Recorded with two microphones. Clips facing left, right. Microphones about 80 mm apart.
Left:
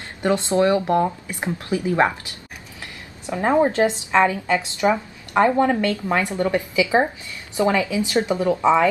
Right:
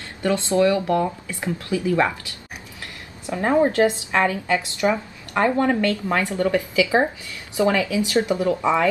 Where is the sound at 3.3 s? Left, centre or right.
Centre.